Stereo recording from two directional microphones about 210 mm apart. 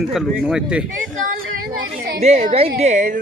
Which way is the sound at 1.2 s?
40° right (ahead or behind).